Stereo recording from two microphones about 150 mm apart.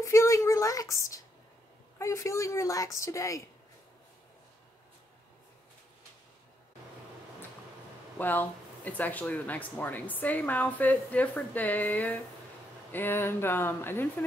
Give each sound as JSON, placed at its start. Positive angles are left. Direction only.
{"t": 0.0, "sound": "a woman's voice", "side_deg": 20}
{"t": 8.2, "sound": "speech", "side_deg": 10}